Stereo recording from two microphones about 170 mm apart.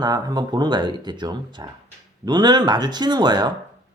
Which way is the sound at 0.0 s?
25° right (ahead or behind).